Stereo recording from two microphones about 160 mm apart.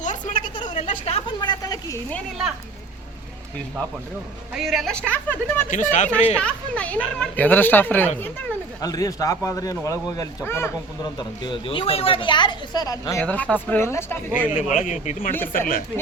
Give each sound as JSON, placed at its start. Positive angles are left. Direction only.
{"t": 0.0, "sound": "a sound", "side_deg": 50}
{"t": 0.5, "sound": "a sound", "side_deg": 30}
{"t": 1.4, "sound": "a sound", "side_deg": 25}
{"t": 4.5, "sound": "a woman's voice", "side_deg": 0}
{"t": 5.7, "sound": "speech", "side_deg": 50}
{"t": 6.3, "sound": "speech", "side_deg": 5}
{"t": 8.8, "sound": "speech", "side_deg": 20}
{"t": 11.0, "sound": "speech", "side_deg": 25}
{"t": 13.2, "sound": "speech", "side_deg": 10}
{"t": 14.5, "sound": "speech", "side_deg": 50}